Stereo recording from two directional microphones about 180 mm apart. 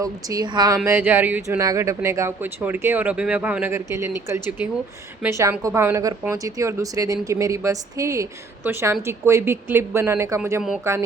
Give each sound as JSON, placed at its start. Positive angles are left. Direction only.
{"t": 0.0, "sound": "speech", "side_deg": -20}
{"t": 0.9, "sound": "speech", "side_deg": -10}